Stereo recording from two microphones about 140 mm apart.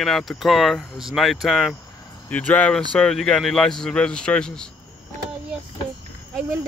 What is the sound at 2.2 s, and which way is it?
Speech, 10° left (ahead or behind).